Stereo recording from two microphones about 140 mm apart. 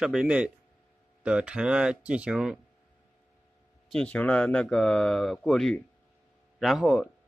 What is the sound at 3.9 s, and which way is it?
Speech, 5° left (ahead or behind).